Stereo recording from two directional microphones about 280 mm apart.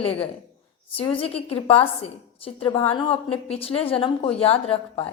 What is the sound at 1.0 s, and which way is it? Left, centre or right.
A woman's voice, centre.